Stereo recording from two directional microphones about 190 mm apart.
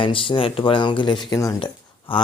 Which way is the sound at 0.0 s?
30° left (ahead or behind).